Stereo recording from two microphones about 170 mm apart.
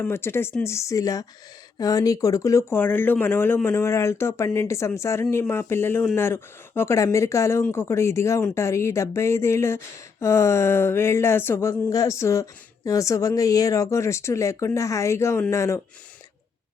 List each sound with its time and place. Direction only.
0.0 s speech: 15° left (ahead or behind)